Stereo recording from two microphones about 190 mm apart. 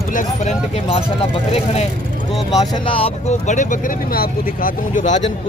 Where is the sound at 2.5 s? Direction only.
20° left (ahead or behind).